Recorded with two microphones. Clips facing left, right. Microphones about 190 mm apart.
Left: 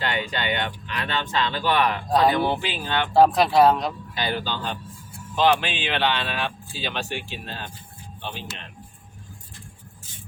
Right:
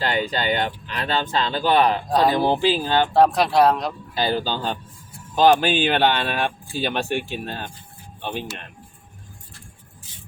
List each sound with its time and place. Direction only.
0.0 s speech: 35° right (ahead or behind)
2.0 s speech: centre (ahead or behind)
2.3 s speech: 35° right (ahead or behind)
3.1 s speech: centre (ahead or behind)
4.1 s speech: 35° right (ahead or behind); by 8.4 s 50° right (ahead or behind)